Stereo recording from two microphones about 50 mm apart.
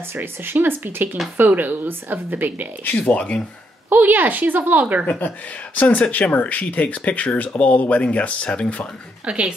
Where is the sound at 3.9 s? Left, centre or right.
Right.